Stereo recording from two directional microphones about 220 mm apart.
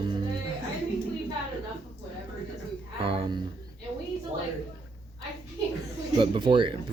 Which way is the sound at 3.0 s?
25° right (ahead or behind).